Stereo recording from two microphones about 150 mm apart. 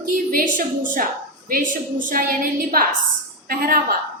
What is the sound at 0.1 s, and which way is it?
A woman's voice, 65° right (ahead or behind).